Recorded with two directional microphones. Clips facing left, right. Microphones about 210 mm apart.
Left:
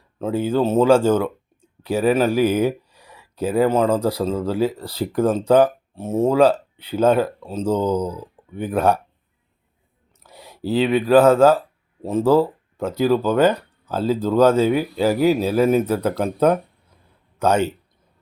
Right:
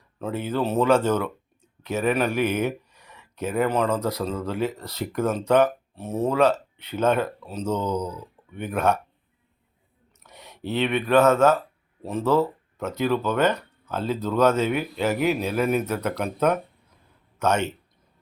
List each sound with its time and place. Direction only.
0.2 s speech: 30° left (ahead or behind)
10.2 s speech: 30° left (ahead or behind)